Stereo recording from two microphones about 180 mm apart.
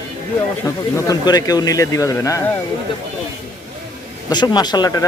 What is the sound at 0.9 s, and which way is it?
Speech, 20° left (ahead or behind).